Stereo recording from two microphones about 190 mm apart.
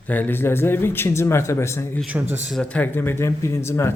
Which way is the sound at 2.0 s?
10° right (ahead or behind).